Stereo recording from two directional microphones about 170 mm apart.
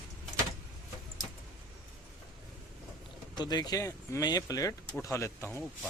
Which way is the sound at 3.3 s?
25° left (ahead or behind).